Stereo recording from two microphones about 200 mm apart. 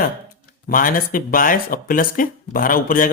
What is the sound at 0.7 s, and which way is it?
Speech, 45° left (ahead or behind).